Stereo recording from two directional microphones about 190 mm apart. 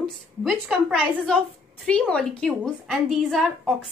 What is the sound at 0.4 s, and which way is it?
A woman's voice, centre (ahead or behind).